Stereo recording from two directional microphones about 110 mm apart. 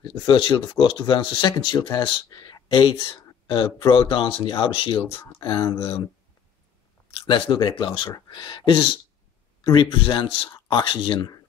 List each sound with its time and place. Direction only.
0.0 s speech: 45° left (ahead or behind)
5.4 s speech: 40° left (ahead or behind)
7.1 s speech: 50° left (ahead or behind)